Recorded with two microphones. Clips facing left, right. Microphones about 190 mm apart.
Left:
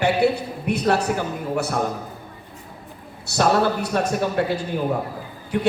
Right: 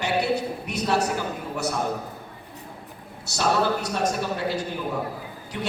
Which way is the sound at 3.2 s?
60° left (ahead or behind).